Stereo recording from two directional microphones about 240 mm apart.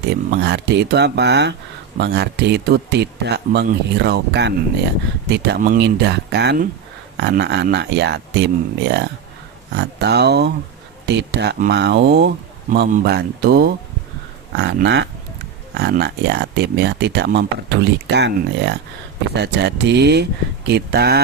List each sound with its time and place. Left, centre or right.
0.1 s speech: right